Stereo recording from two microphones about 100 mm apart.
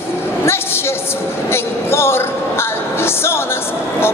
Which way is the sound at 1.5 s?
25° left (ahead or behind).